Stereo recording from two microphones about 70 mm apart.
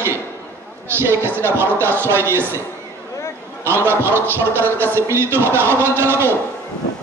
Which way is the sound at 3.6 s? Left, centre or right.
Right.